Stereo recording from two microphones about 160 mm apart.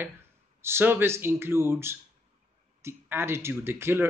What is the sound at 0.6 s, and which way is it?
Speech, 15° right (ahead or behind).